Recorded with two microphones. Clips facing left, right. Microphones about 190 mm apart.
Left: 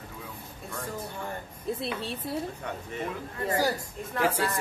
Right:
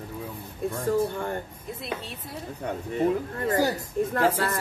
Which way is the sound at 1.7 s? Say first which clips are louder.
Left 8 dB; 30° left (ahead or behind).